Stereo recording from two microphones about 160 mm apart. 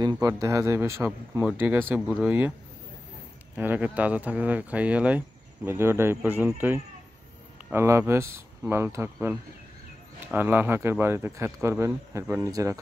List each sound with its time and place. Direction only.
0.0 s speech: 25° right (ahead or behind); by 2.5 s 10° right (ahead or behind)
3.5 s speech: 10° right (ahead or behind)